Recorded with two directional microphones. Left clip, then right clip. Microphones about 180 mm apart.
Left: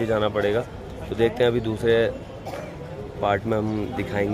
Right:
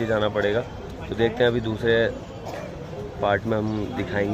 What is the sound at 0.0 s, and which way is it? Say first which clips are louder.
Speech: even; 10° left (ahead or behind).